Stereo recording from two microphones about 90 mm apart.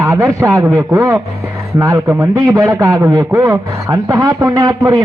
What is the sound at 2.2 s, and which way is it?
A man's voice, 40° right (ahead or behind).